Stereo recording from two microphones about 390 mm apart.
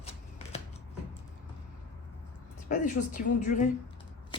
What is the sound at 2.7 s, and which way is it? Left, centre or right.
A woman's voice, centre.